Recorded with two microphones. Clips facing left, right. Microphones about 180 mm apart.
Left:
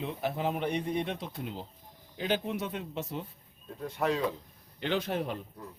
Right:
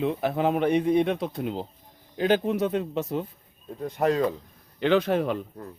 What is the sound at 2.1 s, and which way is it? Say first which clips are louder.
Speech: right 8 dB; 90° right.